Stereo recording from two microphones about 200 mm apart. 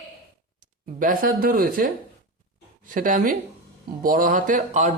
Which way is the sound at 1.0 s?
45° right (ahead or behind).